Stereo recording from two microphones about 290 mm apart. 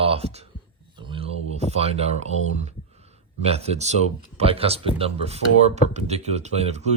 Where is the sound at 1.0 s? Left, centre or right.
Centre.